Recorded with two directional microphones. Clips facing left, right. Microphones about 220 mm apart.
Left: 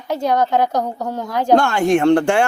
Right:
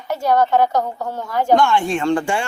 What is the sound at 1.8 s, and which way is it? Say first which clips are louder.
Speech: left 6 dB; 65° left (ahead or behind).